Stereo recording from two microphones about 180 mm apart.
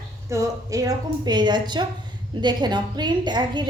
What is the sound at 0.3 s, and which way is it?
A woman's voice, 20° right (ahead or behind).